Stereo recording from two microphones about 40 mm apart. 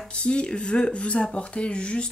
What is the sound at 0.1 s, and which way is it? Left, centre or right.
Speech, left.